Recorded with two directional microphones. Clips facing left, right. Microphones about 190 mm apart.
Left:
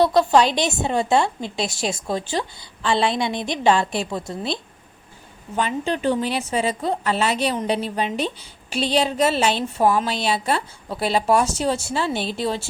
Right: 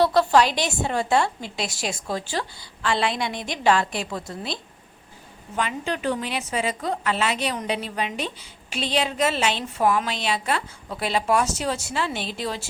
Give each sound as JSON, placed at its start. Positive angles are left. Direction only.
{"t": 0.0, "sound": "a woman's voice", "side_deg": 15}